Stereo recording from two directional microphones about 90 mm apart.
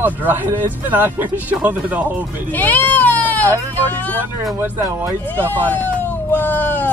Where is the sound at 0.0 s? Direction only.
20° right (ahead or behind).